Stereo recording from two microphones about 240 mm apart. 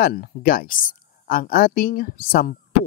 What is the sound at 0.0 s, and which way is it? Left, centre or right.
A man's voice, left.